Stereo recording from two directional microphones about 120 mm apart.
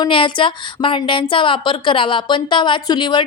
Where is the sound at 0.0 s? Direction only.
45° left (ahead or behind).